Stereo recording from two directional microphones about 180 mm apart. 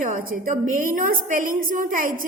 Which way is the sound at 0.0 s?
50° right (ahead or behind).